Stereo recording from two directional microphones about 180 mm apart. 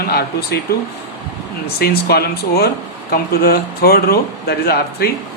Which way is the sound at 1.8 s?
60° left (ahead or behind).